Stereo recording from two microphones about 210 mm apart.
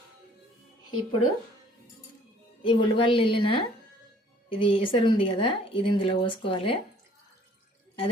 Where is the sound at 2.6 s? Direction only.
25° left (ahead or behind).